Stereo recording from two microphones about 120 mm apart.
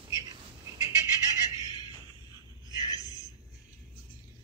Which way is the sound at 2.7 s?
30° left (ahead or behind).